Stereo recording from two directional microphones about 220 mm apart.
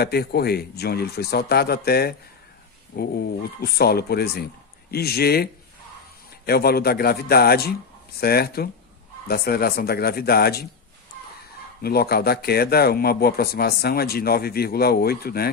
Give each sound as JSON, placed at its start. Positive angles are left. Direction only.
{"t": 0.0, "sound": "speech", "side_deg": 45}
{"t": 11.8, "sound": "speech", "side_deg": 45}